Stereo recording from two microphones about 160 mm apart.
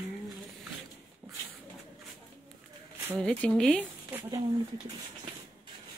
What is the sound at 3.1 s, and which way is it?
Speech, 5° left (ahead or behind).